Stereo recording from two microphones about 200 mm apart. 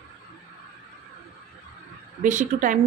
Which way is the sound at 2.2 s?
40° right (ahead or behind).